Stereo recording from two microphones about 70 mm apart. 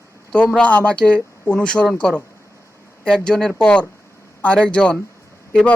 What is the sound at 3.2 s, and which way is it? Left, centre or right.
Speech, centre.